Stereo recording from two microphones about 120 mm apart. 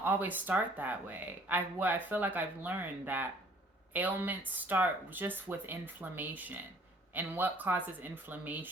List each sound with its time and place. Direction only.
0.0 s speech: 15° right (ahead or behind)